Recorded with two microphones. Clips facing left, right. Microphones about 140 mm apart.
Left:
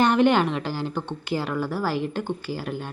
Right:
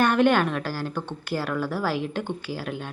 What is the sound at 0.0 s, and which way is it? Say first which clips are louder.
A woman's voice: left 1 dB; 15° left (ahead or behind).